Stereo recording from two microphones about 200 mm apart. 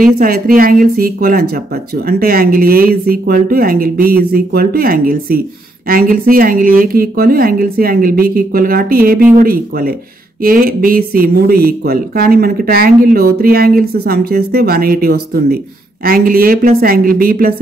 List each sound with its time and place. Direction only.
0.0 s speech: 45° right (ahead or behind)